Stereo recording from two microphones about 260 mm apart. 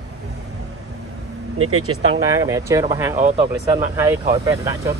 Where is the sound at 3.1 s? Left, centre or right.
Right.